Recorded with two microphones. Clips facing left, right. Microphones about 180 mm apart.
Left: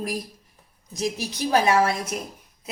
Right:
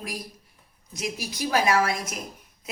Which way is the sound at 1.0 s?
35° left (ahead or behind).